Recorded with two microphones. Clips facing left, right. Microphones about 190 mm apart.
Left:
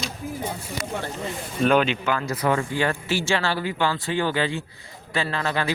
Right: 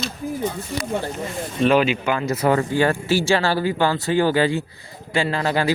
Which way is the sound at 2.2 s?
25° right (ahead or behind).